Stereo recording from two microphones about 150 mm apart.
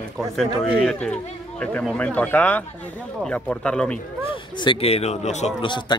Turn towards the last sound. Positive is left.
turn(degrees=30)  # may be behind; listen again after turning